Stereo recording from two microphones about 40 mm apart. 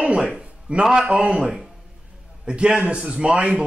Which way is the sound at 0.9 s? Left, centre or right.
Right.